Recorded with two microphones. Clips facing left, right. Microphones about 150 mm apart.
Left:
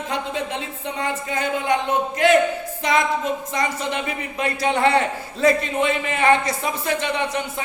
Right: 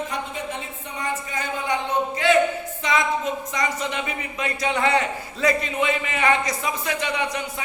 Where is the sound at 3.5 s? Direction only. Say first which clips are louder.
Left 2 dB; 30° left (ahead or behind).